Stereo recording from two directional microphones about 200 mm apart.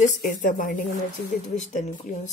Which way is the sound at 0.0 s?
40° left (ahead or behind).